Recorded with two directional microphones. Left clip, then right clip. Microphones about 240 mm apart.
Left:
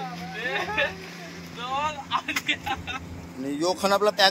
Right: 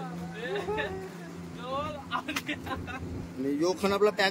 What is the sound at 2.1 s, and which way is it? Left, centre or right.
Speech, centre.